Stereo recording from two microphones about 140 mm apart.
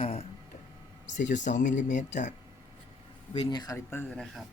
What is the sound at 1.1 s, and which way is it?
Speech, 60° left (ahead or behind).